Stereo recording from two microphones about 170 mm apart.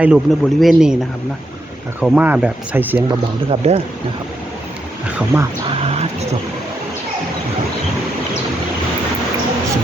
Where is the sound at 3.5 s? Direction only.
35° right (ahead or behind).